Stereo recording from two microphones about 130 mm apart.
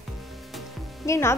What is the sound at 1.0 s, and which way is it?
Speech, 20° left (ahead or behind).